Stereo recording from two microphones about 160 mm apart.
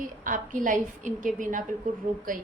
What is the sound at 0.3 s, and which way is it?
Speech, 55° right (ahead or behind).